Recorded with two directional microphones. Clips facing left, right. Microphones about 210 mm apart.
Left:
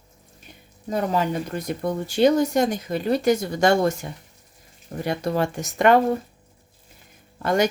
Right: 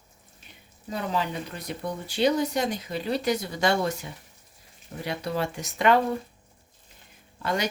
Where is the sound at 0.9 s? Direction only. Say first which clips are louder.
Left 6 dB; 45° left (ahead or behind).